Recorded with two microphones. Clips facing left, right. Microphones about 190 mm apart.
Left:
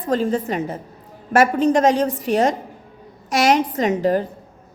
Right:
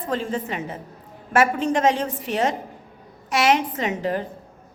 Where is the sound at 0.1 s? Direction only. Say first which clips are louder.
Left 6 dB; 40° left (ahead or behind).